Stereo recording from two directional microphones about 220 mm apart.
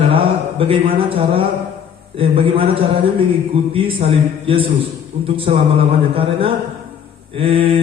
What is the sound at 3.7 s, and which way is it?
Speech, 25° right (ahead or behind).